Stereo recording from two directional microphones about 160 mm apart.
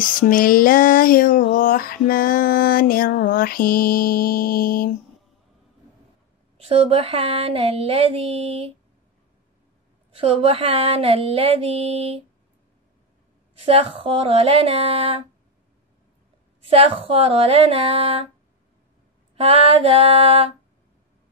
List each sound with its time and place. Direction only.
0.0 s a sound: 60° left (ahead or behind)
6.6 s speech: 35° right (ahead or behind)
10.1 s speech: 35° right (ahead or behind)
13.7 s speech: 35° right (ahead or behind)
16.8 s speech: 40° right (ahead or behind)
19.3 s speech: 40° right (ahead or behind)